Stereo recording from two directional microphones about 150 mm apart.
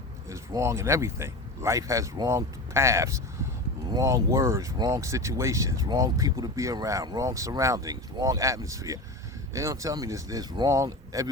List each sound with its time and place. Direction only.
0.3 s speech: 20° right (ahead or behind)